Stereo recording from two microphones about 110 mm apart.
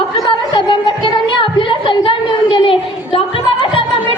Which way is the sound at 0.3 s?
45° left (ahead or behind).